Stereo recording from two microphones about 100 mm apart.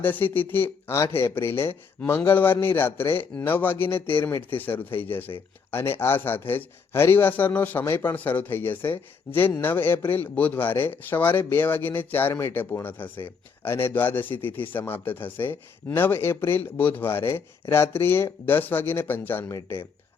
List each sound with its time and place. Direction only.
0.0 s speech: 20° left (ahead or behind)